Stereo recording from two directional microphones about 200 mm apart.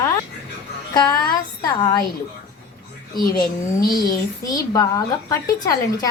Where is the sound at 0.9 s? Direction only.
20° left (ahead or behind).